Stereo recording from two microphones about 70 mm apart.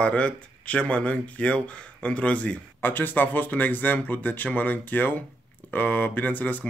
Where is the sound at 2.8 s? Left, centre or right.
Left.